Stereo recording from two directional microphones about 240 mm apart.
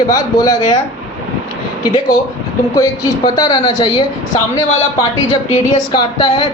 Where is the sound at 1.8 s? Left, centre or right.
Centre.